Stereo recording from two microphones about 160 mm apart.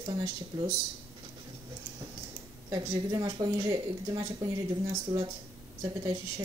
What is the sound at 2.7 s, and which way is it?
Speech, 20° right (ahead or behind).